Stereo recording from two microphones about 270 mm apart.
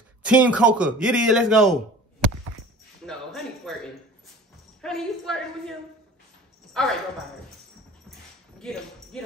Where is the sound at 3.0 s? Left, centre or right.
Centre.